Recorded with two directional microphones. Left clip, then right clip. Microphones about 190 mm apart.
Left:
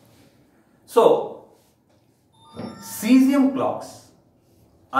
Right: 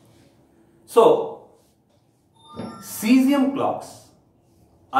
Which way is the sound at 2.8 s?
5° right (ahead or behind).